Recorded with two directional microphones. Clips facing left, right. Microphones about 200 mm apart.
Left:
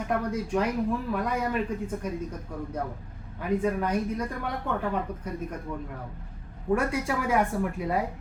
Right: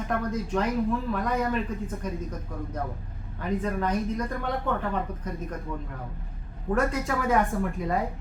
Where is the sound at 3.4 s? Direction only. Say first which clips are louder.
Left 2 dB; 10° left (ahead or behind).